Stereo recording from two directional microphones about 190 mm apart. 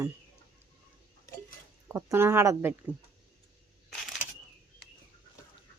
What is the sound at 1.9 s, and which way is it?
Speech, 10° right (ahead or behind).